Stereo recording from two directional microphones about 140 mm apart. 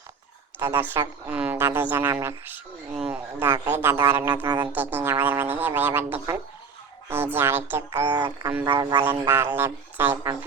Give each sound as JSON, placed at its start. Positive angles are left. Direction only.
{"t": 0.6, "sound": "speech", "side_deg": -15}
{"t": 4.4, "sound": "speech", "side_deg": -30}
{"t": 4.7, "sound": "speech", "side_deg": -15}
{"t": 8.0, "sound": "a sound", "side_deg": -30}
{"t": 8.6, "sound": "speech", "side_deg": -30}
{"t": 9.3, "sound": "speech", "side_deg": -15}